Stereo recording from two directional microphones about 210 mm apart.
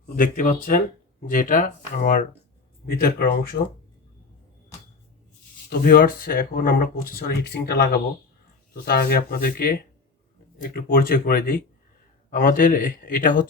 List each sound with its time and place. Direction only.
0.2 s speech: 40° left (ahead or behind)
5.8 s speech: 45° left (ahead or behind)